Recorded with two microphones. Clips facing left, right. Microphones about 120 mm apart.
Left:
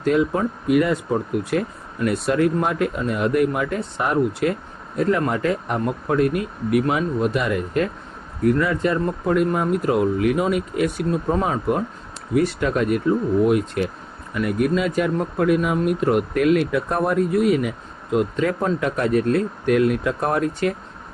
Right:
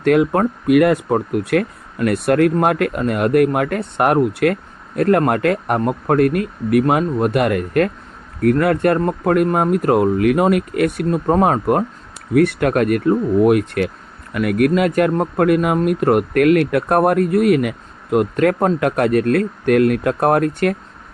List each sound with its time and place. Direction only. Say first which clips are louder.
0.0 s speech: right 5 dB; 65° right (ahead or behind)